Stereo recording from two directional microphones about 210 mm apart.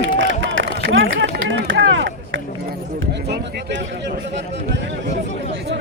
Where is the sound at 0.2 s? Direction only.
65° right (ahead or behind).